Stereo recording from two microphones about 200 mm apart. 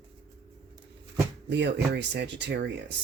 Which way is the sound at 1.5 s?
60° right (ahead or behind).